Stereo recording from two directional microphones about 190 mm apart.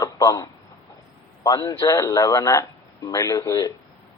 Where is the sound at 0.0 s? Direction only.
15° left (ahead or behind).